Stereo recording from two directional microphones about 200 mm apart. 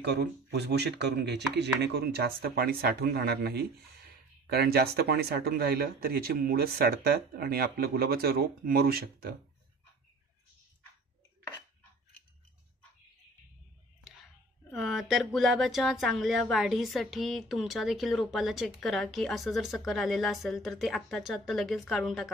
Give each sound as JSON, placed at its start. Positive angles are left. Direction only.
{"t": 0.0, "sound": "speech", "side_deg": -55}
{"t": 14.7, "sound": "speech", "side_deg": 0}